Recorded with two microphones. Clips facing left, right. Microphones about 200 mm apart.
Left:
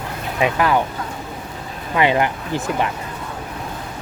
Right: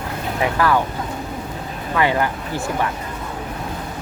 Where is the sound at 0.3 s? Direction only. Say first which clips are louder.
Left 1 dB; 20° left (ahead or behind).